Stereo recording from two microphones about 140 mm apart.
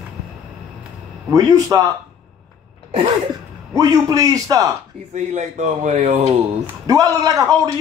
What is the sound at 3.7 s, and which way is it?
A man's voice, 25° right (ahead or behind).